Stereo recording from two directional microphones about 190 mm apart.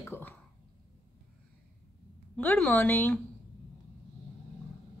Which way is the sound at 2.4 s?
10° left (ahead or behind).